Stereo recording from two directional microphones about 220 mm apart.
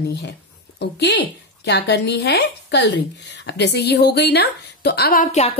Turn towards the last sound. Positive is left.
turn(degrees=35)  # may be behind; listen again after turning